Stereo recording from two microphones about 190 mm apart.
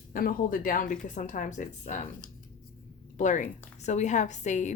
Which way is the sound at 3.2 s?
40° left (ahead or behind).